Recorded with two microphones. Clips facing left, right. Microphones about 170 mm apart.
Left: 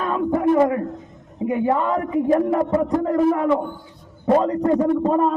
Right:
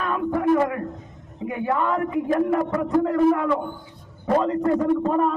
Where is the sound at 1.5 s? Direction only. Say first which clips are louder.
Left 4 dB; 25° left (ahead or behind).